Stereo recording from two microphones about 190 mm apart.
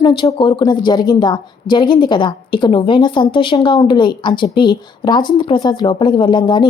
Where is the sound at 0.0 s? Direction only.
25° left (ahead or behind).